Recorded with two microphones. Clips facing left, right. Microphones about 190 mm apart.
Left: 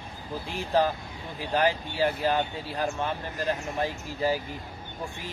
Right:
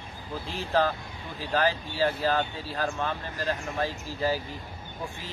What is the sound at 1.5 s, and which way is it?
Speech, 20° left (ahead or behind).